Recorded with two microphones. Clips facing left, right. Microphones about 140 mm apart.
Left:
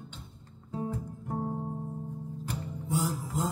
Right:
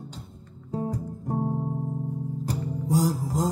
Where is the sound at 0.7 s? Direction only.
35° right (ahead or behind).